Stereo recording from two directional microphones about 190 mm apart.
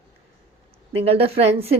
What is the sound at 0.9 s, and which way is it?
Speech, 30° right (ahead or behind).